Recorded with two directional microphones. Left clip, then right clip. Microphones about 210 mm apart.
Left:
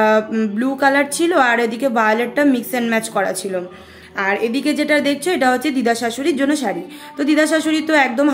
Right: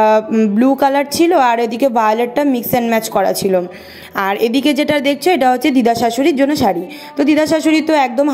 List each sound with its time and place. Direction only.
0.0 s a woman's voice: 25° right (ahead or behind)